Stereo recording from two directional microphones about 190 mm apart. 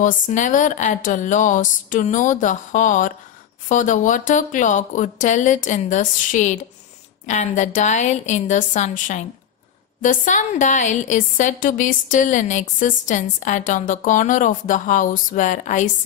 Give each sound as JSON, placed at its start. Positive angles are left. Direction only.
{"t": 0.0, "sound": "a woman's voice", "side_deg": 40}